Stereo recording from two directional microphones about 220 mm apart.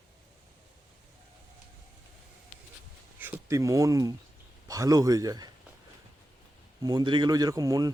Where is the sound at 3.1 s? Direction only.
10° right (ahead or behind).